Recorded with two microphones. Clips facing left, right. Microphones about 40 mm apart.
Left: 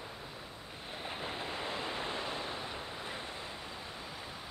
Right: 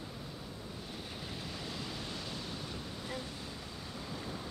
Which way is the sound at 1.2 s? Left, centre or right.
Left.